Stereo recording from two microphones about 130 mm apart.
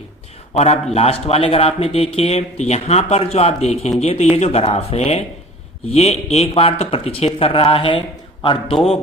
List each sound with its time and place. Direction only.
0.5 s a man's voice: 55° left (ahead or behind)